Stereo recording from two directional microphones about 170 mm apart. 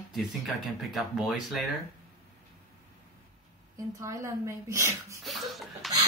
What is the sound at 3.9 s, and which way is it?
A woman's voice, 20° right (ahead or behind).